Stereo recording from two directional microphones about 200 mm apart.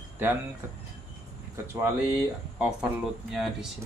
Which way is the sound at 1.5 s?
15° right (ahead or behind).